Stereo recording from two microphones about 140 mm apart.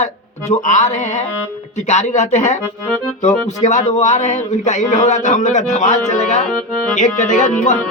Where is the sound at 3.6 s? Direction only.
60° left (ahead or behind).